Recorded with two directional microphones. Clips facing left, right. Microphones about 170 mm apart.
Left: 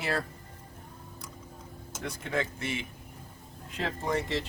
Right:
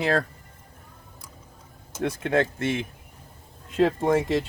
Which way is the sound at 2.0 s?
70° right (ahead or behind).